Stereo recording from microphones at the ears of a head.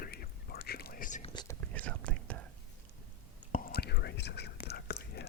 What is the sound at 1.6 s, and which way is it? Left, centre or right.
Whispering, right.